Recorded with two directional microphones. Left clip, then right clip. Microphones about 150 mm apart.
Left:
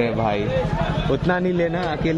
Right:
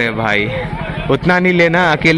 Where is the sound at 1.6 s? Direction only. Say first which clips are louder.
Right 11 dB; 35° right (ahead or behind).